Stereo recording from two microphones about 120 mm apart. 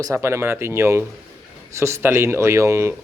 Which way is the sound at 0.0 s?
25° right (ahead or behind).